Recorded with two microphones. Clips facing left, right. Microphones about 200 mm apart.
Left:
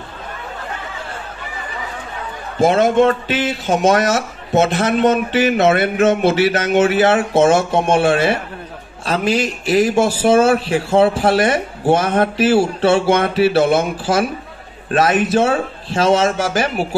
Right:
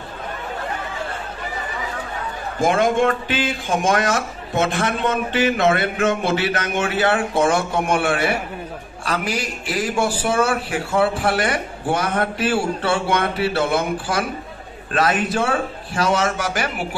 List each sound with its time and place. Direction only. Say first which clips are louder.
2.6 s speech: left 5 dB; 20° left (ahead or behind)